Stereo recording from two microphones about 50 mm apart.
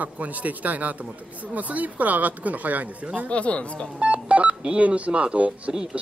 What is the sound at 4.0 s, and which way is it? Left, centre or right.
Speech, right.